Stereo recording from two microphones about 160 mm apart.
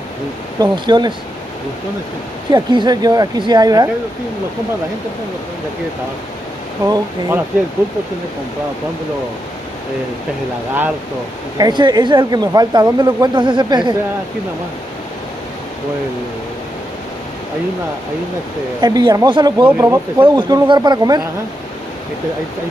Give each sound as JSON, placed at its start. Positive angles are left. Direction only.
{"t": 0.6, "sound": "speech", "side_deg": -25}
{"t": 2.5, "sound": "speech", "side_deg": -25}
{"t": 6.9, "sound": "speech", "side_deg": -15}
{"t": 11.5, "sound": "speech", "side_deg": -25}
{"t": 18.8, "sound": "speech", "side_deg": -25}
{"t": 19.6, "sound": "speech", "side_deg": -15}